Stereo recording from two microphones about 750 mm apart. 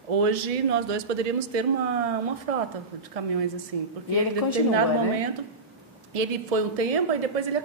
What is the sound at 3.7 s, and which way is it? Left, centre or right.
Speech, right.